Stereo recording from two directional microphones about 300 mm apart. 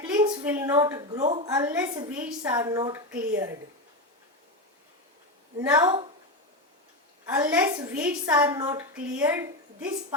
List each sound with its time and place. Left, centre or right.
0.0 s a sound: centre
1.2 s a woman's voice: right
1.5 s a woman's voice: centre
5.5 s a woman's voice: centre
7.3 s a woman's voice: centre